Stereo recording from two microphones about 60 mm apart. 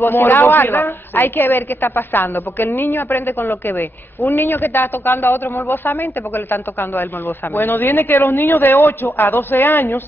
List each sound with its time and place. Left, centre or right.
0.0 s a woman's voice: left